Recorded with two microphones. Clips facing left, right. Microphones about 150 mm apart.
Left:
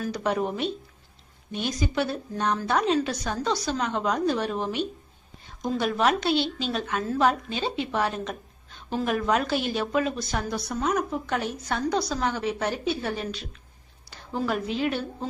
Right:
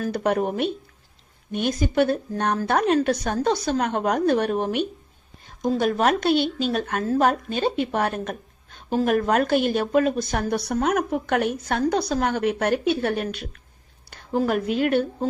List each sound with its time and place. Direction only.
0.0 s a woman's voice: 50° right (ahead or behind)